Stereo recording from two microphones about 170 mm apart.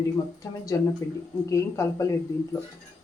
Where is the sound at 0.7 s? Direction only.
20° left (ahead or behind).